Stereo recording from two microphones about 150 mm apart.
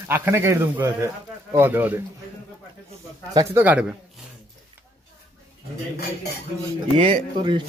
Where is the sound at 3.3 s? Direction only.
15° right (ahead or behind).